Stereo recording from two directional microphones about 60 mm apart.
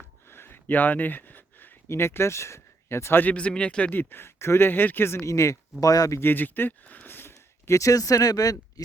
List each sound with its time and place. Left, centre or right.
0.3 s a sound: left
1.9 s speech: left
3.3 s speech: centre
3.9 s speech: left
5.8 s speech: left
6.1 s speech: left
7.7 s speech: left